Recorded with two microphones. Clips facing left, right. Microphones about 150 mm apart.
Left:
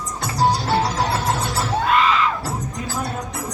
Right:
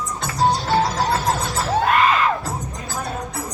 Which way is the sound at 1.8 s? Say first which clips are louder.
Even; 50° right (ahead or behind).